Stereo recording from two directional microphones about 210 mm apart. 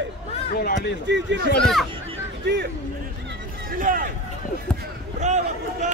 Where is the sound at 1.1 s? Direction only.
55° right (ahead or behind).